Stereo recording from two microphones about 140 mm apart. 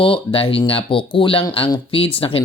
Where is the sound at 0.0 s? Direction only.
40° left (ahead or behind).